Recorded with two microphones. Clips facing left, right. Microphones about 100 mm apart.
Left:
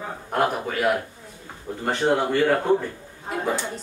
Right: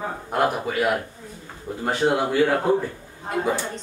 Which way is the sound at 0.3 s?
5° right (ahead or behind).